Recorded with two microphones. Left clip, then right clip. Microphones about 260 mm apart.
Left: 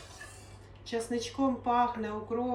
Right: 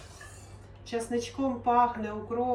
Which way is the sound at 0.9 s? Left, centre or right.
Centre.